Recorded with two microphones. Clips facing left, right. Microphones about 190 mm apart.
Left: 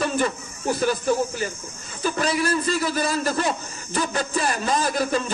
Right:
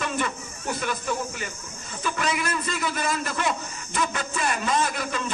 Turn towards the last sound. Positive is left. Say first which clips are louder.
# left 4 dB
turn(degrees=35)  # may be behind; listen again after turning